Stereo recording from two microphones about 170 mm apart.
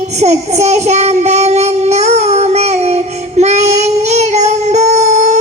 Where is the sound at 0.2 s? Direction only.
40° right (ahead or behind).